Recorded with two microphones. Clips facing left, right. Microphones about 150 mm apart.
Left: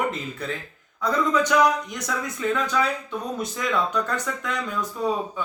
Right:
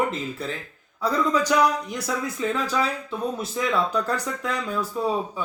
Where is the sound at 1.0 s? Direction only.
35° right (ahead or behind).